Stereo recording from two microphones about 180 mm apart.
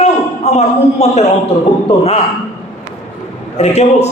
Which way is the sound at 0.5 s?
35° left (ahead or behind).